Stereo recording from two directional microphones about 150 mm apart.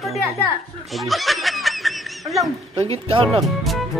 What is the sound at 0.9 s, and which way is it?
Snicker, centre (ahead or behind).